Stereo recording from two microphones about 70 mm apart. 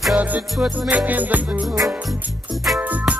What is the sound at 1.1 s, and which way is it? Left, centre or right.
Music, right.